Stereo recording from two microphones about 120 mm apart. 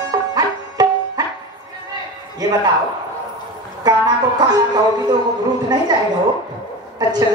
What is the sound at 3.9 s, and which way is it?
Music, 35° right (ahead or behind).